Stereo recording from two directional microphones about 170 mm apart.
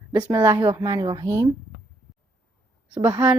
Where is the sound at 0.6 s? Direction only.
25° right (ahead or behind).